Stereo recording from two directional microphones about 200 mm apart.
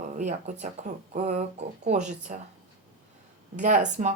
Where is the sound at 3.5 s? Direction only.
35° right (ahead or behind).